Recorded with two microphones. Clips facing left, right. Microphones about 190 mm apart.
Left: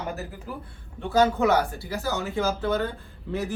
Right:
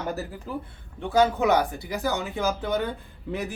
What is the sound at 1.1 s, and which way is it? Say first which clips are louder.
Speech: even; 15° right (ahead or behind).